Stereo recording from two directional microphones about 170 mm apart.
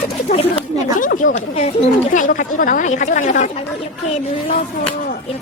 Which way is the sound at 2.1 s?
55° left (ahead or behind).